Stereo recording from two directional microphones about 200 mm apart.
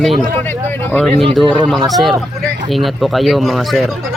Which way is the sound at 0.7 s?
10° left (ahead or behind).